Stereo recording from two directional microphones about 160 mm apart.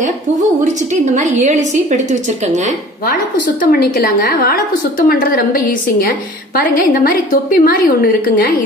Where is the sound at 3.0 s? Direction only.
60° left (ahead or behind).